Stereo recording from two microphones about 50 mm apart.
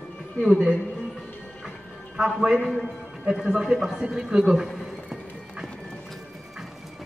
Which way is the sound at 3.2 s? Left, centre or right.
Right.